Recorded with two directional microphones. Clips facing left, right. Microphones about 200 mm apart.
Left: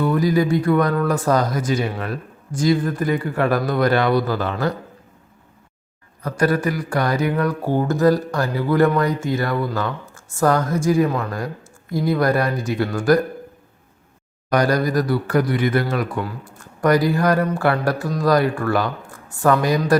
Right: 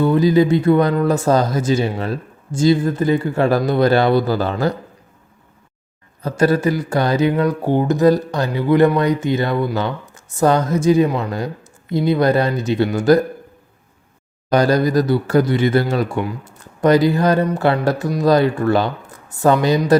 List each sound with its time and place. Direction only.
0.0 s speech: 25° right (ahead or behind)
6.2 s speech: 25° right (ahead or behind)
14.5 s speech: 25° right (ahead or behind)